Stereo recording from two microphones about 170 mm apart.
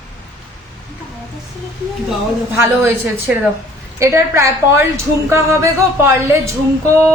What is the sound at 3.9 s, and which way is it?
A woman's voice, 15° right (ahead or behind).